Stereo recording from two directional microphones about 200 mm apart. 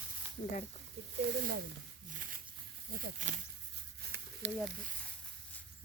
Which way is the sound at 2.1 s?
45° right (ahead or behind).